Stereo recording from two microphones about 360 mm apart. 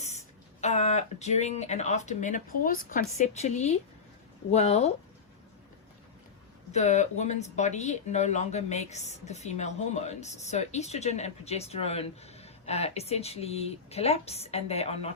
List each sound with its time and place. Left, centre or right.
0.6 s speech: centre
6.7 s speech: centre